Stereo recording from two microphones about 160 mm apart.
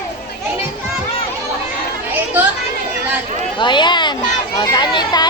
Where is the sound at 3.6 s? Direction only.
30° left (ahead or behind).